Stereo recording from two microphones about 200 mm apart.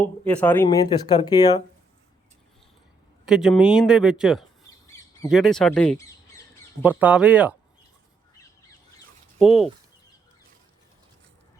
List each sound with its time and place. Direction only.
0.0 s speech: 5° left (ahead or behind)
3.2 s speech: centre (ahead or behind)
6.8 s speech: 5° right (ahead or behind)
9.4 s speech: centre (ahead or behind)